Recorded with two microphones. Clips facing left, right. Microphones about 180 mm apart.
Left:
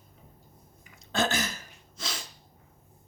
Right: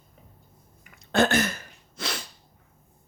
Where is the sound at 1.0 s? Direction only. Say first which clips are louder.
Right 7 dB; 60° right (ahead or behind).